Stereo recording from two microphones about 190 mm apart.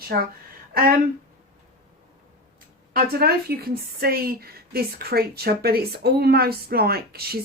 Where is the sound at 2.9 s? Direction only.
55° right (ahead or behind).